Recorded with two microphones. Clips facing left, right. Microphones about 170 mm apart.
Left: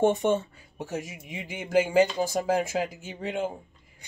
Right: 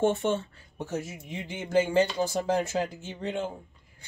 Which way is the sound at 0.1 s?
15° left (ahead or behind).